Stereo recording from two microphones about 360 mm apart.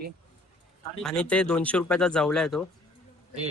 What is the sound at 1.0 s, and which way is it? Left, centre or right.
Speech, centre.